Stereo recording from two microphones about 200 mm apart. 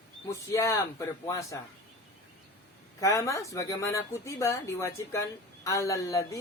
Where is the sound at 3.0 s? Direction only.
15° left (ahead or behind).